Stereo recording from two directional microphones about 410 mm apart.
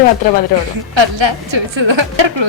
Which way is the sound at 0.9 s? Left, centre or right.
Right.